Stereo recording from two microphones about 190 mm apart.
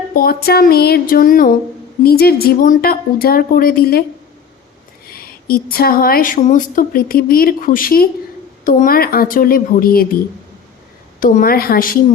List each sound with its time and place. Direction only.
0.1 s a woman's voice: 50° left (ahead or behind)
5.1 s a woman's voice: 50° left (ahead or behind)
11.2 s a woman's voice: 45° left (ahead or behind)